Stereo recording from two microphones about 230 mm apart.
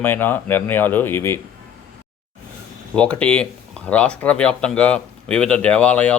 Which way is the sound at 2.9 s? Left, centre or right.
Centre.